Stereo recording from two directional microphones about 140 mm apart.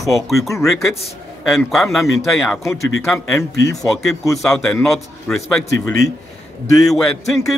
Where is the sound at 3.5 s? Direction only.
25° left (ahead or behind).